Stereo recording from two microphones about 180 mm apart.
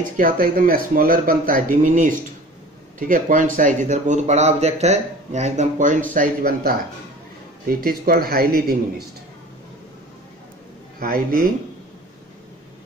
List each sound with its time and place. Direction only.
0.2 s a man's voice: 50° right (ahead or behind)
11.0 s speech: 55° right (ahead or behind)